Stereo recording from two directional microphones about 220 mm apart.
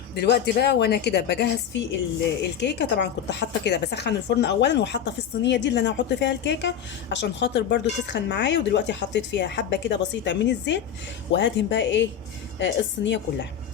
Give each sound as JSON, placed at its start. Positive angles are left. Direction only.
{"t": 0.1, "sound": "a woman's voice", "side_deg": 50}